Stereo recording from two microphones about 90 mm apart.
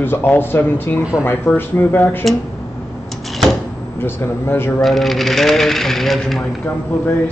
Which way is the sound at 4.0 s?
25° left (ahead or behind).